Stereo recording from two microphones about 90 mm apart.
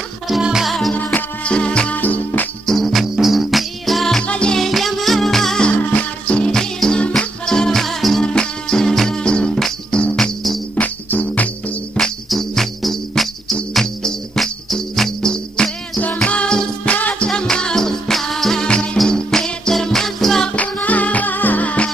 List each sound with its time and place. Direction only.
0.3 s music: 5° right (ahead or behind)
0.9 s music: 15° left (ahead or behind)
2.6 s music: centre (ahead or behind)
10.8 s cricket: 15° left (ahead or behind)
11.9 s music: 5° left (ahead or behind)
20.5 s music: 15° left (ahead or behind)